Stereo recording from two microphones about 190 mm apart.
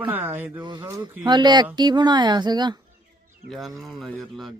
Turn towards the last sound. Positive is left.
turn(degrees=0)  # may be behind; listen again after turning